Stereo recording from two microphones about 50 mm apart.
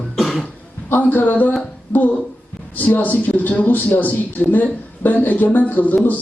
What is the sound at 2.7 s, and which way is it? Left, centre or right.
Speech, left.